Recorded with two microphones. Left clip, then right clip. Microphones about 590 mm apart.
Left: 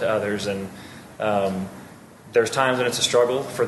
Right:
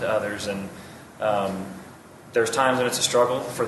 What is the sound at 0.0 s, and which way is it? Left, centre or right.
A man's voice, left.